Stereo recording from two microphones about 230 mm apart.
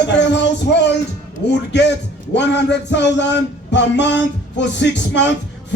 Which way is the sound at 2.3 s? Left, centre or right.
Left.